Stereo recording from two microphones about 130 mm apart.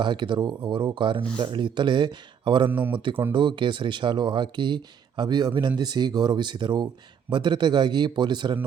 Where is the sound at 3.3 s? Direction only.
40° right (ahead or behind).